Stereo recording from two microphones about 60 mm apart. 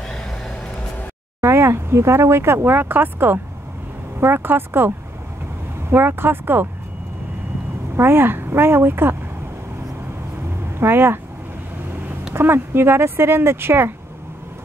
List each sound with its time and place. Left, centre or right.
1.4 s speech: right
7.9 s a woman's voice: right
10.8 s speech: right
12.4 s speech: right